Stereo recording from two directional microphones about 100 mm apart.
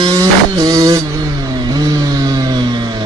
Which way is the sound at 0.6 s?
40° right (ahead or behind).